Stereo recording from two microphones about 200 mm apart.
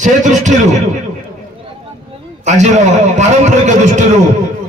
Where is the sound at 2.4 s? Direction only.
35° right (ahead or behind).